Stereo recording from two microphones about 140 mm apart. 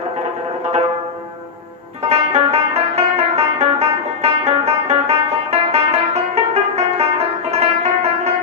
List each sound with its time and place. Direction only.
2.0 s music: 50° right (ahead or behind)